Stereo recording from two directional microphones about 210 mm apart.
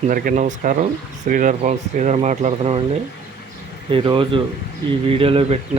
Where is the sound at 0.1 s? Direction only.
40° right (ahead or behind).